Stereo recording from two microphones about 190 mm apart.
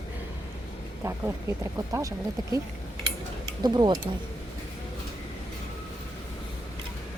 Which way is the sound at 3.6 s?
20° right (ahead or behind).